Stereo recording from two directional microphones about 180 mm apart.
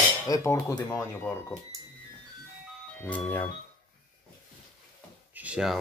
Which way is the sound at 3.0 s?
10° left (ahead or behind).